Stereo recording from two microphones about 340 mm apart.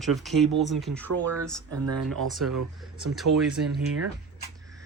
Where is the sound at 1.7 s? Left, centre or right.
Right.